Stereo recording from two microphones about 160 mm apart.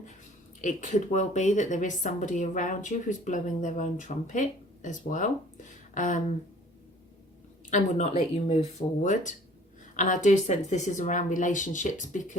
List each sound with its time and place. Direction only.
0.6 s a woman's voice: 50° left (ahead or behind)
7.7 s a woman's voice: 50° left (ahead or behind)